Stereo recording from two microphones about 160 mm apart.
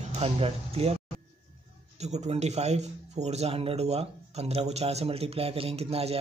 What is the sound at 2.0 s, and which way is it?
Speech, 45° right (ahead or behind).